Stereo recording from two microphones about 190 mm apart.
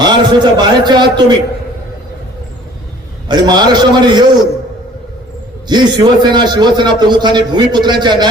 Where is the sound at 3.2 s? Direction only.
20° right (ahead or behind).